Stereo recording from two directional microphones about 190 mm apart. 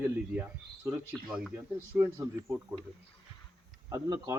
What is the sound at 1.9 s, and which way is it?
Speech, 15° right (ahead or behind).